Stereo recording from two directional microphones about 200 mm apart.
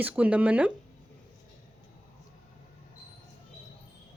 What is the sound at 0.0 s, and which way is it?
Speech, 5° right (ahead or behind).